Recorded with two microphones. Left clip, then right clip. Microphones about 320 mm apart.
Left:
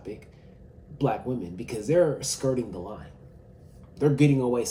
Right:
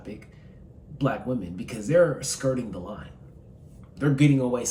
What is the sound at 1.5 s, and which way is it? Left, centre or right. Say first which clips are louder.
Speech: right 2 dB; centre.